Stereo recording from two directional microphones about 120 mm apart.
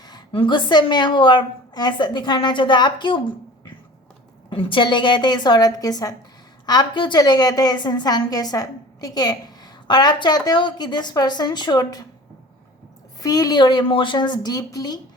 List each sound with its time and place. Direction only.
0.3 s a woman's voice: 40° left (ahead or behind)
13.1 s a woman's voice: 30° left (ahead or behind)